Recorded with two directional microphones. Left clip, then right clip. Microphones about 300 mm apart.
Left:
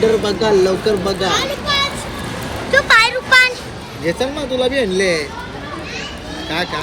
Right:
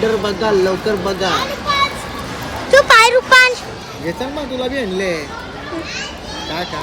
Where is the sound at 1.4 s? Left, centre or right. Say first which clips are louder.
Even; centre.